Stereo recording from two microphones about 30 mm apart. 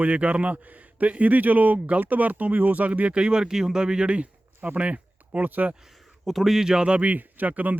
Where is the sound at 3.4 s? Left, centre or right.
Right.